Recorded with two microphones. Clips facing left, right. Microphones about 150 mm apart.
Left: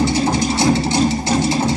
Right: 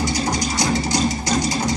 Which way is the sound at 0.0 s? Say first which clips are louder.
Left 5 dB; 25° left (ahead or behind).